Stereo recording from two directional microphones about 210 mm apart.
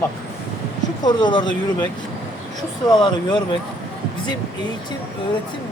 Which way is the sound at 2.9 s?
20° left (ahead or behind).